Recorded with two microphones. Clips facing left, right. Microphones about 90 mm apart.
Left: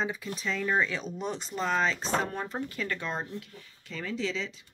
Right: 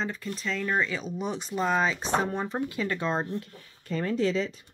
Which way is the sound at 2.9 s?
25° right (ahead or behind).